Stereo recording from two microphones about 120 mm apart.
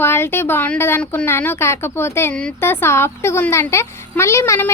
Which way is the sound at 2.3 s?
10° left (ahead or behind).